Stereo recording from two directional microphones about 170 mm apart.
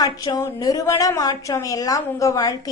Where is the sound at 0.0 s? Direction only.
20° left (ahead or behind).